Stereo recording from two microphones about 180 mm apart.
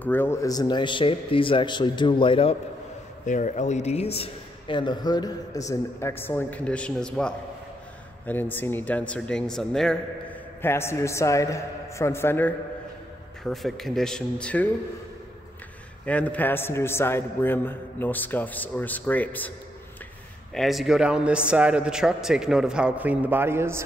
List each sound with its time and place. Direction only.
0.0 s a man's voice: 10° left (ahead or behind); by 2.5 s 30° left (ahead or behind)
3.3 s a man's voice: 45° left (ahead or behind); by 9.9 s 5° left (ahead or behind)
10.6 s a man's voice: 15° left (ahead or behind)
13.4 s a man's voice: centre (ahead or behind)
16.1 s a man's voice: 10° left (ahead or behind)
20.5 s a man's voice: centre (ahead or behind)